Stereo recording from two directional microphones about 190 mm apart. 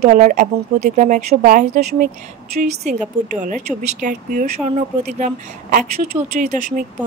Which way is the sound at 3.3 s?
45° right (ahead or behind).